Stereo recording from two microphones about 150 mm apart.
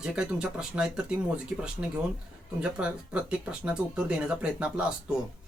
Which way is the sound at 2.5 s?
5° right (ahead or behind).